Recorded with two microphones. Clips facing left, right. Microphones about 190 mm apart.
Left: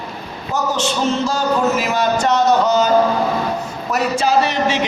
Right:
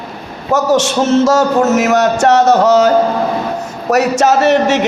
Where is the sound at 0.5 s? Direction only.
80° right.